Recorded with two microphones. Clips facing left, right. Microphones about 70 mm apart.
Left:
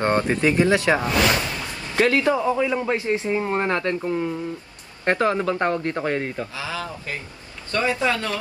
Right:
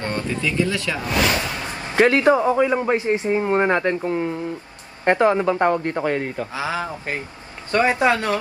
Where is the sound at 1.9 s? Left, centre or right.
Right.